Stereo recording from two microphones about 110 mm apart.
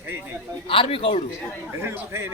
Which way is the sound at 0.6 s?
55° left (ahead or behind).